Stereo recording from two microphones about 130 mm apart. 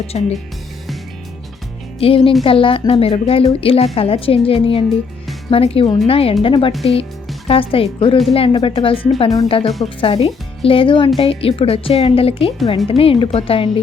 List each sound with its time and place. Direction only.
0.1 s a woman's voice: 55° left (ahead or behind)
2.0 s a woman's voice: 45° left (ahead or behind)